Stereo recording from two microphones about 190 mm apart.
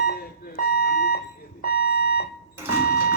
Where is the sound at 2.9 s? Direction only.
55° left (ahead or behind).